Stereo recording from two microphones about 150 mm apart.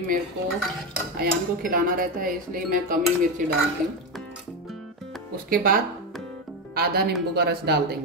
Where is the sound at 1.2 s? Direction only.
75° right (ahead or behind).